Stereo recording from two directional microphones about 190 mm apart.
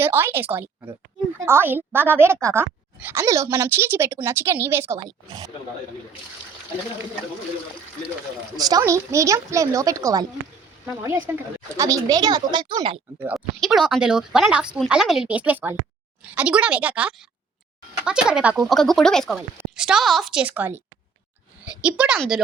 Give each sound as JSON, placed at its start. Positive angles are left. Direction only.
{"t": 0.0, "sound": "speech", "side_deg": -10}
{"t": 8.5, "sound": "a woman's voice", "side_deg": -20}
{"t": 13.2, "sound": "speech", "side_deg": 0}